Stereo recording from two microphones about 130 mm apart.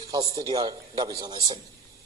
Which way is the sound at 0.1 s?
30° right (ahead or behind).